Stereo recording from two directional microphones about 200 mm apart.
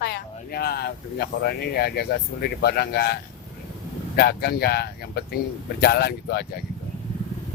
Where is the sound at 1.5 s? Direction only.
50° left (ahead or behind).